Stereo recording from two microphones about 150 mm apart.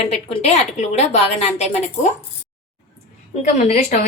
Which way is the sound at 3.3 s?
45° left (ahead or behind).